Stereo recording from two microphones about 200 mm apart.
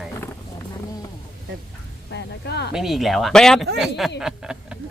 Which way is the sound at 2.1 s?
55° left (ahead or behind).